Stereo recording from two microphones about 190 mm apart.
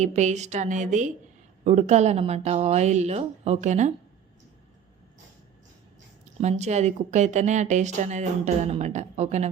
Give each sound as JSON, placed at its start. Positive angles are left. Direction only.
{"t": 0.0, "sound": "speech", "side_deg": -40}
{"t": 6.4, "sound": "speech", "side_deg": -35}